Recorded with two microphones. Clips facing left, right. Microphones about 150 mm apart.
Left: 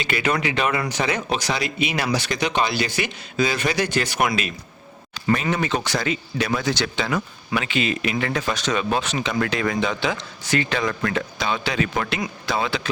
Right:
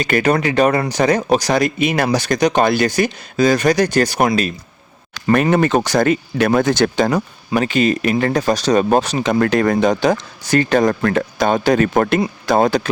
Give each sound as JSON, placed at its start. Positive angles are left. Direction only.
{"t": 0.0, "sound": "speech", "side_deg": -40}
{"t": 5.3, "sound": "speech", "side_deg": -55}